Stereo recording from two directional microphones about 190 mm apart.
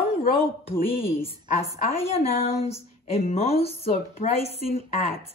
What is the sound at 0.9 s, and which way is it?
A woman's voice, 30° left (ahead or behind).